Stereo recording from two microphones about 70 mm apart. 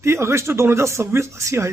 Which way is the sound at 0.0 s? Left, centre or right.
Right.